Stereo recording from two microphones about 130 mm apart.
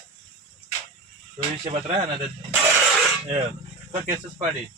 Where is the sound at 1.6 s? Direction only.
40° right (ahead or behind).